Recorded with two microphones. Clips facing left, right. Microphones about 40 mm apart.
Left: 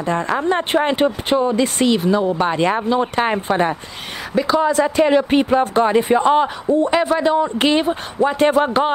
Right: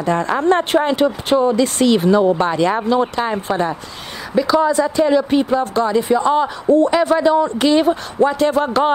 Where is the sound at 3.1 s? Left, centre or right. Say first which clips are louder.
Left 2 dB; left.